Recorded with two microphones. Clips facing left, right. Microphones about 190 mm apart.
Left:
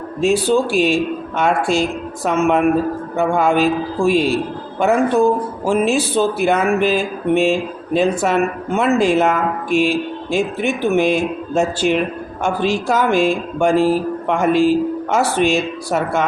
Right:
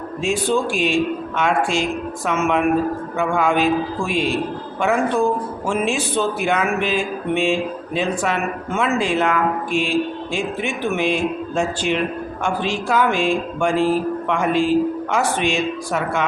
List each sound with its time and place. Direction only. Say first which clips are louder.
0.2 s speech: left 5 dB; 40° left (ahead or behind)
9.6 s mantra: left 6 dB; 5° left (ahead or behind)
10.3 s speech: left 6 dB; 40° left (ahead or behind)